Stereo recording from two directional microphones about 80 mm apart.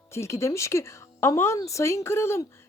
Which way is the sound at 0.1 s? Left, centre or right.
Left.